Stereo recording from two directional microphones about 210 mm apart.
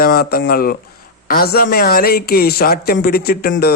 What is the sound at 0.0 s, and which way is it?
Speech, 45° left (ahead or behind).